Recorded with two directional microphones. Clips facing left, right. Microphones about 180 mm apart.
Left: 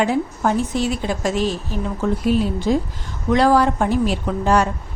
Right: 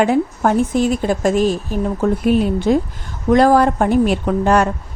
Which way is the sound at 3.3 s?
50° right (ahead or behind).